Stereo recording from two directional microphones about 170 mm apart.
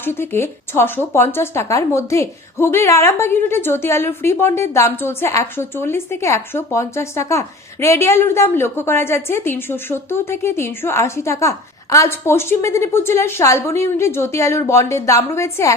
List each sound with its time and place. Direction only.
0.0 s speech: 15° left (ahead or behind)